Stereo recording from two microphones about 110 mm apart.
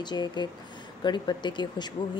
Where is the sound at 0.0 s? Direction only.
40° left (ahead or behind).